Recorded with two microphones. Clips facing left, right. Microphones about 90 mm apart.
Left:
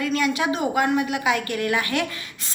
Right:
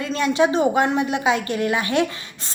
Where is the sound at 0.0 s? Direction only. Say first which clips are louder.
Right 3 dB; 30° right (ahead or behind).